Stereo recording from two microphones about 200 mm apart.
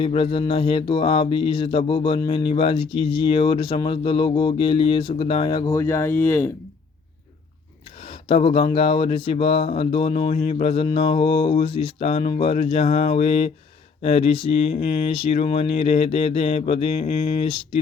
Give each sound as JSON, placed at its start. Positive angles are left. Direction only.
{"t": 0.0, "sound": "speech", "side_deg": 25}
{"t": 8.0, "sound": "speech", "side_deg": 30}